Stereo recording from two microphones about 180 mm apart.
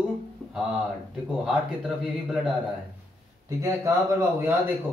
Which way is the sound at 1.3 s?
5° right (ahead or behind).